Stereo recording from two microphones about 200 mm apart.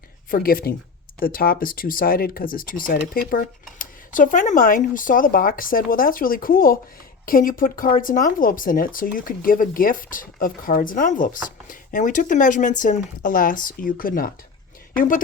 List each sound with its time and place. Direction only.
0.3 s speech: 45° left (ahead or behind)